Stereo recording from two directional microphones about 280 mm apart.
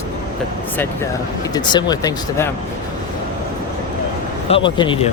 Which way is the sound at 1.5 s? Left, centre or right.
Centre.